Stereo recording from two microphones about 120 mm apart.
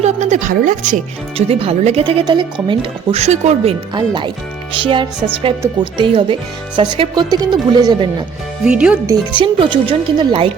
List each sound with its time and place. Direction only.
0.0 s a sound: 70° right (ahead or behind); by 1.0 s 90° right
1.4 s speech: 55° right (ahead or behind)
2.2 s speech: 40° right (ahead or behind)
3.2 s speech: 65° right (ahead or behind)
3.9 s speech: 40° right (ahead or behind)
8.6 s speech: 10° right (ahead or behind)
9.3 s speech: 45° right (ahead or behind)